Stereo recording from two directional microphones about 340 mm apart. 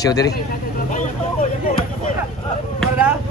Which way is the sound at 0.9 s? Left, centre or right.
Left.